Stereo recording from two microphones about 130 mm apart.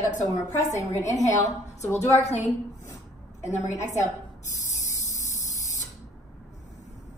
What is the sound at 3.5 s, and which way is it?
Speech, 65° left (ahead or behind).